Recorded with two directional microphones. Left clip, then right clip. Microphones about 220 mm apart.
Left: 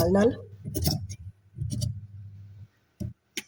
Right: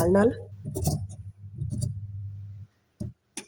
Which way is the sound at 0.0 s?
Centre (ahead or behind).